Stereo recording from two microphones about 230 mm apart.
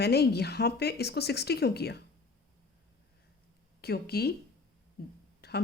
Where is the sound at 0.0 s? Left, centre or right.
Left.